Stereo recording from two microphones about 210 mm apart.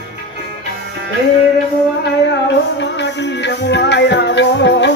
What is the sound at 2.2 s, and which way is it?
Music, 55° left (ahead or behind).